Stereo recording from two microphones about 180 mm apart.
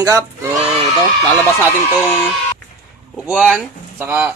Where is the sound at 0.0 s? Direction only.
15° right (ahead or behind).